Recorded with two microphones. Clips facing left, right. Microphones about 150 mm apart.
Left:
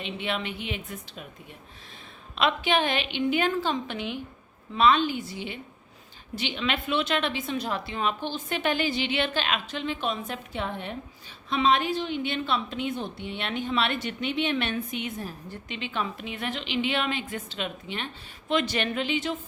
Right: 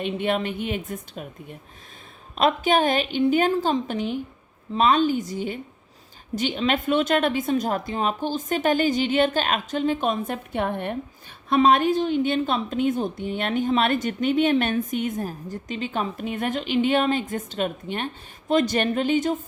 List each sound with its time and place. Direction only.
0.0 s a woman's voice: 50° right (ahead or behind)